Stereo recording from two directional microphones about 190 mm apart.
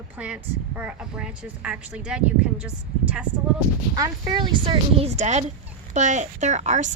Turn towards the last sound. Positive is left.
turn(degrees=-40)  # may be behind; listen again after turning